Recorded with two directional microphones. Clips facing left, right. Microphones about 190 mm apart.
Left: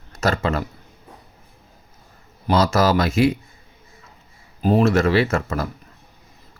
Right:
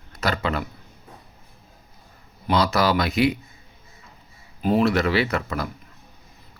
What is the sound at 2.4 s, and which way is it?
Speech, 45° left (ahead or behind).